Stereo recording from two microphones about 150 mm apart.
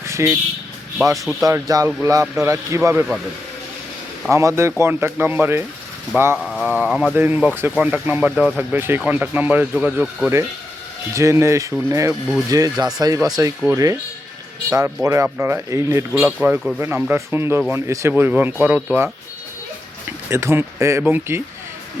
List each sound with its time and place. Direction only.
0.0 s vehicle: 20° right (ahead or behind)
1.1 s speech: centre (ahead or behind)
1.4 s speech: 25° right (ahead or behind)
4.3 s speech: 20° right (ahead or behind)
6.4 s speech: centre (ahead or behind)
11.1 s speech: 20° right (ahead or behind)
15.0 s speech: 20° right (ahead or behind)
20.3 s speech: 15° right (ahead or behind)